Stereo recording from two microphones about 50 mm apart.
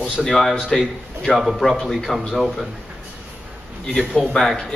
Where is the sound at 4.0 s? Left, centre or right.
Centre.